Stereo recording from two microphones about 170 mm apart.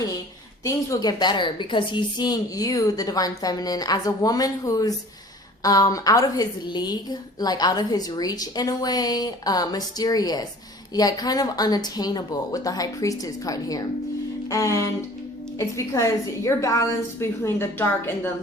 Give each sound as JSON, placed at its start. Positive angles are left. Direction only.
{"t": 0.6, "sound": "a woman's voice", "side_deg": 20}